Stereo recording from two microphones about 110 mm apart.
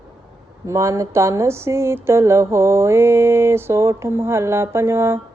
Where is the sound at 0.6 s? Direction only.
25° right (ahead or behind).